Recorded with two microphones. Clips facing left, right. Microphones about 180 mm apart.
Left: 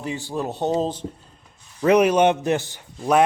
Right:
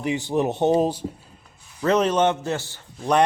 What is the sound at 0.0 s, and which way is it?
Speech, 15° right (ahead or behind).